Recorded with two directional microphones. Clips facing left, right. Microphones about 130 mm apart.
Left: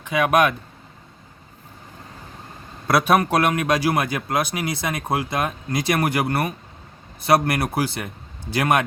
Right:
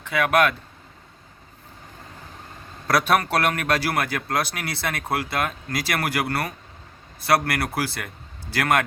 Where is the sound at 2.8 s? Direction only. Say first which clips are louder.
Left 3 dB; 15° left (ahead or behind).